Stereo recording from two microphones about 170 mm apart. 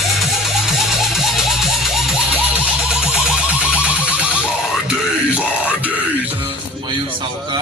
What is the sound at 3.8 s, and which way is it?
Music, 5° right (ahead or behind).